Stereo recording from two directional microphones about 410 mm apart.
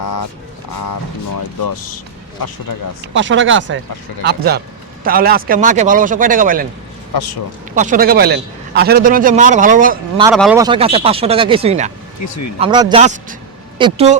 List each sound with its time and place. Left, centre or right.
0.0 s a sound: left
0.7 s speech: left
3.0 s a man's voice: right
7.8 s a man's voice: centre
10.2 s speech: centre
12.2 s speech: left
12.5 s speech: centre